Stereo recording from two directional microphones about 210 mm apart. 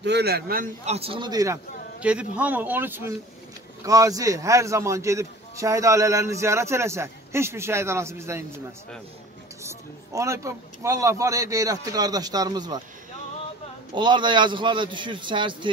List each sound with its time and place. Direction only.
0.0 s a man's voice: 50° right (ahead or behind)
0.8 s a man's voice: 30° right (ahead or behind); by 8.5 s 10° right (ahead or behind)
9.6 s a man's voice: 15° right (ahead or behind)
13.9 s a man's voice: 20° right (ahead or behind)